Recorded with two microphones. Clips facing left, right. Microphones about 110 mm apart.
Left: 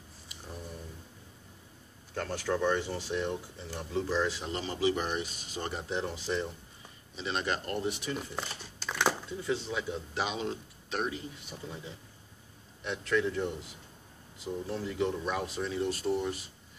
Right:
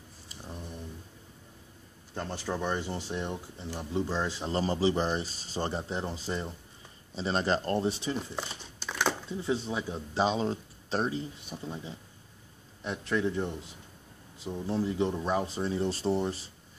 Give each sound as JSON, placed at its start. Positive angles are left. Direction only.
{"t": 2.1, "sound": "speech", "side_deg": -25}
{"t": 8.4, "sound": "crumpling", "side_deg": 0}
{"t": 9.4, "sound": "speech", "side_deg": -25}
{"t": 12.8, "sound": "speech", "side_deg": -30}